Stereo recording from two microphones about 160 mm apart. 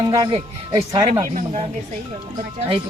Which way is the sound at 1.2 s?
50° right (ahead or behind).